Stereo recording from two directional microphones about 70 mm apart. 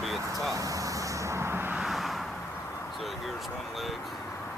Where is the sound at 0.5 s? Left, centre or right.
Right.